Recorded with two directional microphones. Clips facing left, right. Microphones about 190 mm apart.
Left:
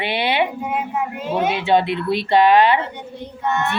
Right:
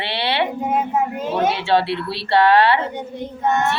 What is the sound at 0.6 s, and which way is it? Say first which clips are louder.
Speech: right 3 dB; 45° right (ahead or behind).